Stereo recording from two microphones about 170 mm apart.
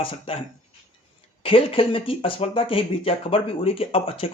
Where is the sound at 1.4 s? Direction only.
30° left (ahead or behind).